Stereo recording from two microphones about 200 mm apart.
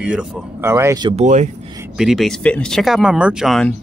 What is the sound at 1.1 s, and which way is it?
Speech, 35° right (ahead or behind).